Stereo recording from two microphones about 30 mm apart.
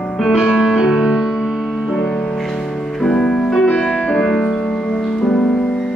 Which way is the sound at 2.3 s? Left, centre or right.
Centre.